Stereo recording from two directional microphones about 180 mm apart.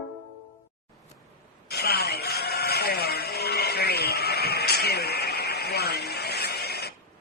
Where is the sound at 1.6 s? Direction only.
60° left (ahead or behind).